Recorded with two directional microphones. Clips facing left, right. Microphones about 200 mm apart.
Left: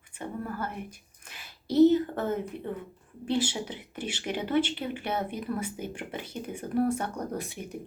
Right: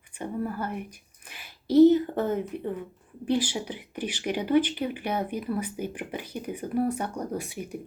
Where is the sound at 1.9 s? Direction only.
15° right (ahead or behind).